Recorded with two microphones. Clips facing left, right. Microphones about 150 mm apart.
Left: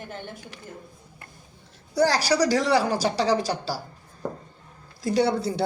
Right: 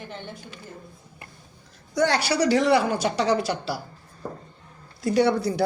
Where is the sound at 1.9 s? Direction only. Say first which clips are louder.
Left 1 dB; 35° left (ahead or behind).